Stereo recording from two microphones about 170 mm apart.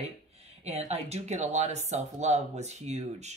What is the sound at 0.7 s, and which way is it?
Speech, 40° right (ahead or behind).